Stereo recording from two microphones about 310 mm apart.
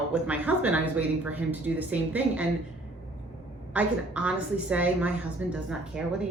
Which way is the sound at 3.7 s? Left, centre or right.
Centre.